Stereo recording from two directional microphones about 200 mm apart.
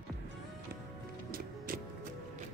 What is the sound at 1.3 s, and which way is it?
Music, 45° right (ahead or behind).